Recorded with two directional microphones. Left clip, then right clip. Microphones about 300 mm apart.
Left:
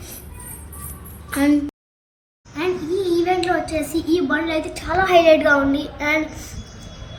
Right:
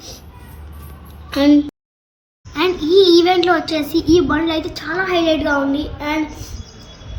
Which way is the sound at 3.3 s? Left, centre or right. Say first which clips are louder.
Right 5 dB; right.